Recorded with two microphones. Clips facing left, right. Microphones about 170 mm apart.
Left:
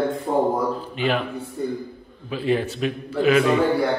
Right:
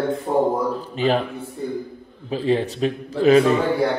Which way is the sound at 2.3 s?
35° right (ahead or behind).